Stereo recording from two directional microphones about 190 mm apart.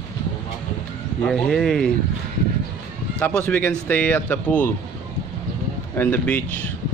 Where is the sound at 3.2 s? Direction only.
10° left (ahead or behind).